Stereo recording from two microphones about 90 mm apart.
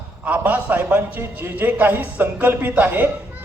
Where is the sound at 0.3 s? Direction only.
15° right (ahead or behind).